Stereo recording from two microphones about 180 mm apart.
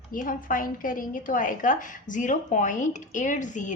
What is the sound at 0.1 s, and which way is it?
A woman's voice, 50° left (ahead or behind).